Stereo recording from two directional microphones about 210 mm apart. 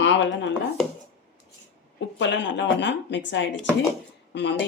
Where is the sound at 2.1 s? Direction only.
60° left (ahead or behind).